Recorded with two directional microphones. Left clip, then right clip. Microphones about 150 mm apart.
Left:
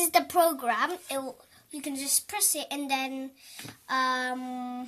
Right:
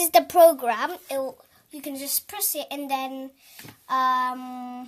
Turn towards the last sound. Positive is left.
turn(degrees=-30)  # may be behind; listen again after turning